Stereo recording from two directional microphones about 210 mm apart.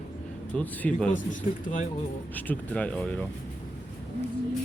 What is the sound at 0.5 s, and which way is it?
Speech, 10° left (ahead or behind).